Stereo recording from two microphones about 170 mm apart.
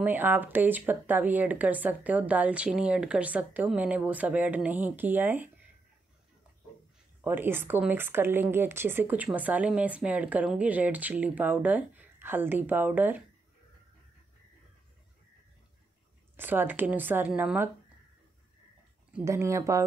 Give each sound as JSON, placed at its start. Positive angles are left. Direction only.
{"t": 0.0, "sound": "speech", "side_deg": -10}
{"t": 7.2, "sound": "speech", "side_deg": -10}
{"t": 16.3, "sound": "speech", "side_deg": -10}
{"t": 19.1, "sound": "speech", "side_deg": -15}